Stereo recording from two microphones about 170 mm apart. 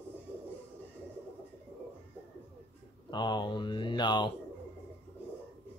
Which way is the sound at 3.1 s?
25° left (ahead or behind).